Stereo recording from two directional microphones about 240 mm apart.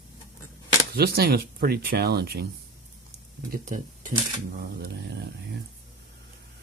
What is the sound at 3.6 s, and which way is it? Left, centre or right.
Speech, right.